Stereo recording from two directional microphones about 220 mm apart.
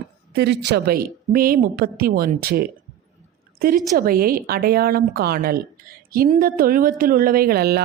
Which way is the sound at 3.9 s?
40° right (ahead or behind).